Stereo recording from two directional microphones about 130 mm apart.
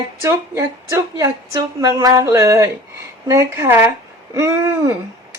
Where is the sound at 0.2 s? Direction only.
20° right (ahead or behind).